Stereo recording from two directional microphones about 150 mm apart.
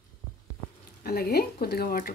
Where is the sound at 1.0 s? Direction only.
90° left.